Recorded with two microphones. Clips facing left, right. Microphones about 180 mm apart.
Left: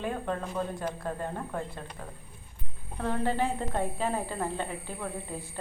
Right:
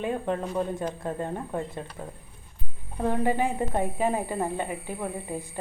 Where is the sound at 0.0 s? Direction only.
20° right (ahead or behind).